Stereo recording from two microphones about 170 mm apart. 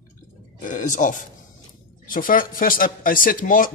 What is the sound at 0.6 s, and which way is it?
Speech, 50° left (ahead or behind).